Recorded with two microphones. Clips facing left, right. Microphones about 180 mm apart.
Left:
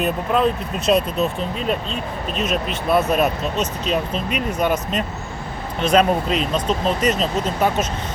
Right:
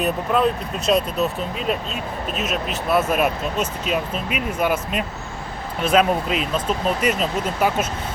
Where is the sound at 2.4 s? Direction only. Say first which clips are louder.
Left 4 dB; centre (ahead or behind).